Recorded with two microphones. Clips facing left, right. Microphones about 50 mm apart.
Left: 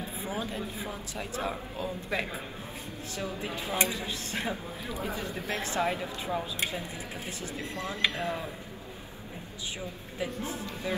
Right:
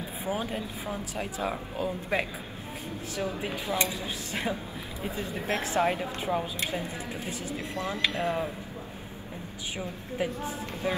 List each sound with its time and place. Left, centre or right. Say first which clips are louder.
0.2 s speech: right 4 dB; right
3.2 s speech: right 3 dB; right
3.7 s speech: left 1 dB; left
5.8 s speech: right 3 dB; right
7.5 s speech: right 3 dB; right
9.8 s speech: right 5 dB; right
10.6 s speech: right 5 dB; right